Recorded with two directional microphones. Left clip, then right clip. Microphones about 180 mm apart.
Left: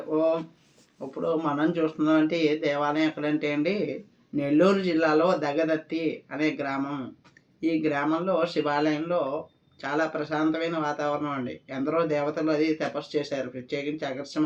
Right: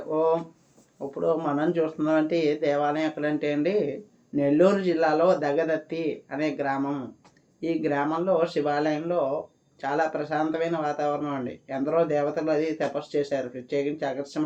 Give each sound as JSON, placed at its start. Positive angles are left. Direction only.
{"t": 0.1, "sound": "a man's voice", "side_deg": -45}